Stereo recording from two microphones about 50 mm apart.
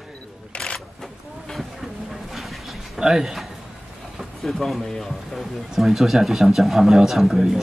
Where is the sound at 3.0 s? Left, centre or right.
Centre.